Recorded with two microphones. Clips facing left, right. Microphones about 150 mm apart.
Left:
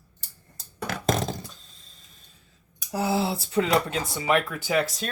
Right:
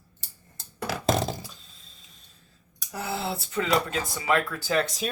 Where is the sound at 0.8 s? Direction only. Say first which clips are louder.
Right 1 dB; 5° right (ahead or behind).